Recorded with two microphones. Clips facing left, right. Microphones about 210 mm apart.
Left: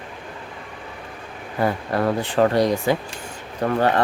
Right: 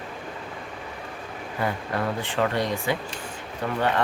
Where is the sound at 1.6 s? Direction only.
40° left (ahead or behind).